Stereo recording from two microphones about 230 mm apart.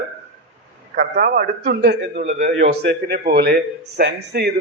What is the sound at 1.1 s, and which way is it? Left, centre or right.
A man's voice, right.